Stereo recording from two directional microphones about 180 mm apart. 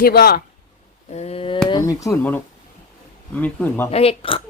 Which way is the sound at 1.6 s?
25° left (ahead or behind).